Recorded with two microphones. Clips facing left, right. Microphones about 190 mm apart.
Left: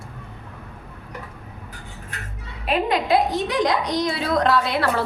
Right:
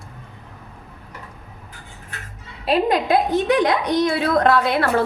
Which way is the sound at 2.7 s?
45° right (ahead or behind).